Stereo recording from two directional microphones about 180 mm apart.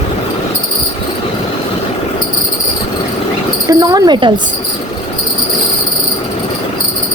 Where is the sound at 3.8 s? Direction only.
20° right (ahead or behind).